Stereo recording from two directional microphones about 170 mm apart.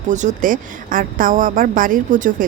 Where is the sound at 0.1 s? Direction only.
45° right (ahead or behind).